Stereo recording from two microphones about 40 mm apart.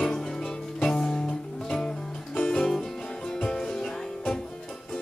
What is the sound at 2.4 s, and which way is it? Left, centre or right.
Music, centre.